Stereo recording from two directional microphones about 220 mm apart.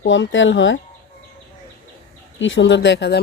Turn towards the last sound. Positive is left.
turn(degrees=55)  # may be behind; listen again after turning